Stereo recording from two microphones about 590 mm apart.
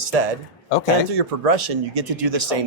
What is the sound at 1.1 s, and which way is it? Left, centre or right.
Speech, right.